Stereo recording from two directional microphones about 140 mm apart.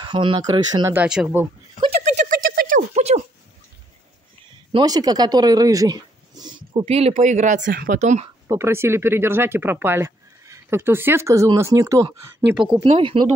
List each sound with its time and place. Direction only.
0.0 s speech: 35° right (ahead or behind)
1.0 s speech: 5° right (ahead or behind)
1.9 s a sound: 65° right (ahead or behind); by 2.9 s 85° right
2.9 s a sound: 50° right (ahead or behind)
4.7 s speech: 25° right (ahead or behind); by 7.2 s 45° right (ahead or behind)
7.2 s speech: 60° right (ahead or behind)
8.5 s speech: 20° right (ahead or behind)
13.0 s speech: 35° right (ahead or behind)